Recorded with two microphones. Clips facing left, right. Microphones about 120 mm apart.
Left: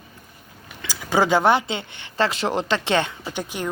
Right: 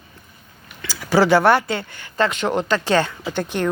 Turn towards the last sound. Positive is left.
turn(degrees=10)  # may be behind; listen again after turning